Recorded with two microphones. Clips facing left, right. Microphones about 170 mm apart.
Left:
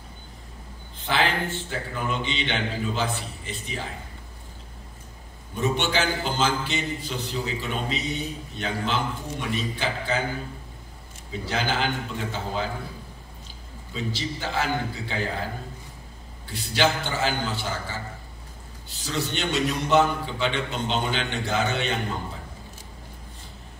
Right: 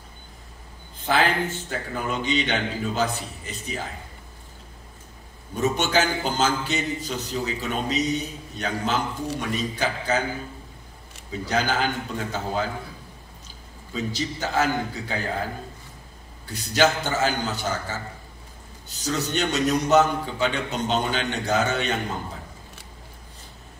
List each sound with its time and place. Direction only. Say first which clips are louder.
1.0 s a man's voice: right 3 dB; 40° right (ahead or behind)
5.6 s a man's voice: right 2 dB; 40° right (ahead or behind)
11.4 s a man's voice: right 2 dB; 40° right (ahead or behind)
13.9 s a man's voice: right 2 dB; 40° right (ahead or behind)
16.4 s a man's voice: right 3 dB; 40° right (ahead or behind)